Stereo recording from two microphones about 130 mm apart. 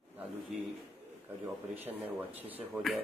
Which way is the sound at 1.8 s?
15° right (ahead or behind).